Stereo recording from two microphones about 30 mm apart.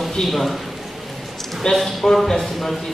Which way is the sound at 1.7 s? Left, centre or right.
Left.